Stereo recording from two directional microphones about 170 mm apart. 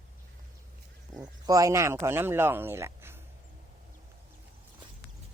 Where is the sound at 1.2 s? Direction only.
20° right (ahead or behind).